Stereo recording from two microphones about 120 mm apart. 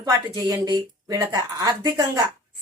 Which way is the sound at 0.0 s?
30° right (ahead or behind).